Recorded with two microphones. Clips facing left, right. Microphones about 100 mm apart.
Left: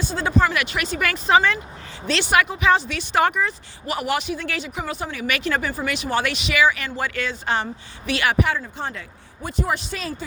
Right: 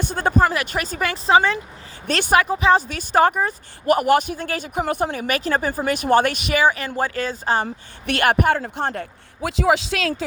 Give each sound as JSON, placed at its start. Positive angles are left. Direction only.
{"t": 0.0, "sound": "speech", "side_deg": -55}
{"t": 2.0, "sound": "speech", "side_deg": -50}
{"t": 2.4, "sound": "speech", "side_deg": -35}
{"t": 8.0, "sound": "speech", "side_deg": -55}
{"t": 9.4, "sound": "speech", "side_deg": -90}